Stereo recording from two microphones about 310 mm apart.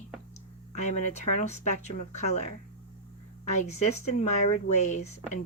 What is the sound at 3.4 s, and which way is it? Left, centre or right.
Speech, left.